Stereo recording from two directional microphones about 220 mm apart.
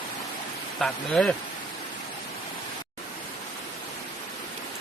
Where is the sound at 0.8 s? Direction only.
5° left (ahead or behind).